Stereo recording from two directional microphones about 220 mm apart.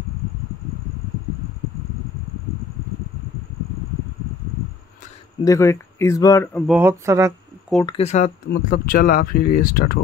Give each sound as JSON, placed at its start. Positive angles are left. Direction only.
{"t": 5.4, "sound": "speech", "side_deg": 15}
{"t": 6.6, "sound": "speech", "side_deg": -5}
{"t": 7.8, "sound": "speech", "side_deg": 25}
{"t": 8.5, "sound": "speech", "side_deg": 40}